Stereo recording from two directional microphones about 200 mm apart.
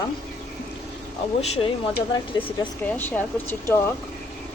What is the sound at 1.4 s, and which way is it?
Speech, 30° left (ahead or behind).